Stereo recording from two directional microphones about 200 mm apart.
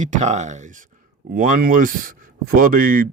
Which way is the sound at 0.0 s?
35° right (ahead or behind).